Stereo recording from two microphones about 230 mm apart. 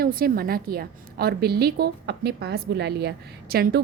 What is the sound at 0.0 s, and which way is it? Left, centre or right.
A woman's voice, right.